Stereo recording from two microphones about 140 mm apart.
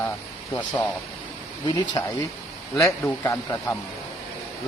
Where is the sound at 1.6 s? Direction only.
30° left (ahead or behind).